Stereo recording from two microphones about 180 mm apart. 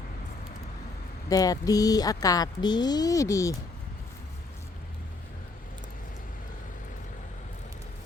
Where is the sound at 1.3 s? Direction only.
20° left (ahead or behind).